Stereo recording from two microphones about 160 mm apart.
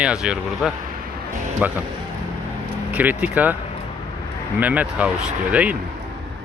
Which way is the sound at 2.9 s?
10° right (ahead or behind).